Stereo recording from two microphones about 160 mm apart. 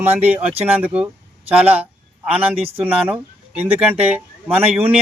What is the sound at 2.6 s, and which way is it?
Speech, 35° right (ahead or behind).